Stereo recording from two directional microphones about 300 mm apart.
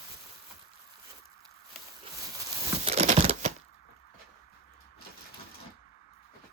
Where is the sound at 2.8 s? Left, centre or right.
Right.